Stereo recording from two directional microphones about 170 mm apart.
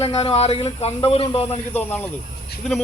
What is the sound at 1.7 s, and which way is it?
Speech, 10° left (ahead or behind).